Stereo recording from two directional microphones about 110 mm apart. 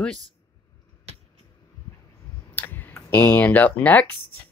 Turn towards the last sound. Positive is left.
turn(degrees=15)  # may be behind; listen again after turning